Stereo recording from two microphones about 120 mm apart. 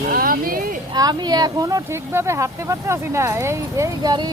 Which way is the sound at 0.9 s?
35° right (ahead or behind).